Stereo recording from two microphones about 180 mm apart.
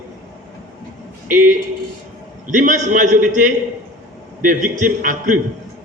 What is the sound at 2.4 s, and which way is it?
A man's voice, 45° right (ahead or behind).